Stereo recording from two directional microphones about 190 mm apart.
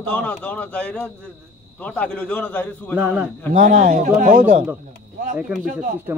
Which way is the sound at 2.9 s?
5° right (ahead or behind).